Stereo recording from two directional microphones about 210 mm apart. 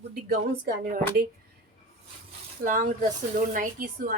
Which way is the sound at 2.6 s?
40° right (ahead or behind).